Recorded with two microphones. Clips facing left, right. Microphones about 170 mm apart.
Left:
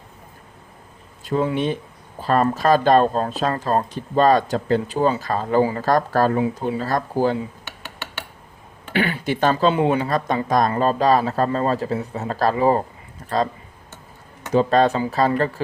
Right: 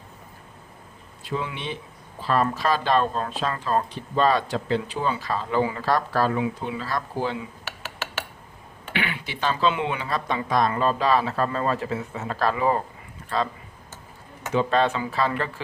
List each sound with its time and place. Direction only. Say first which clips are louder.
1.2 s speech: left 9 dB; 45° left (ahead or behind)
8.9 s speech: left 8 dB; 40° left (ahead or behind)
14.5 s speech: left 5 dB; 40° left (ahead or behind)